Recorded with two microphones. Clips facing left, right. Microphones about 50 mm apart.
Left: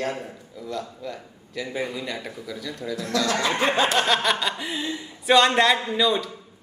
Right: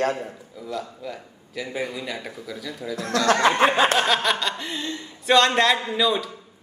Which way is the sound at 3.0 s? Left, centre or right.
Right.